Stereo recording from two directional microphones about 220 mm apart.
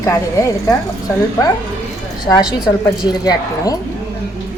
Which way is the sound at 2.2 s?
20° left (ahead or behind).